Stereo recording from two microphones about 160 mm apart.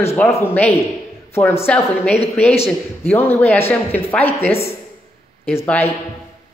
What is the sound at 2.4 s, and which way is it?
Speech, 40° left (ahead or behind).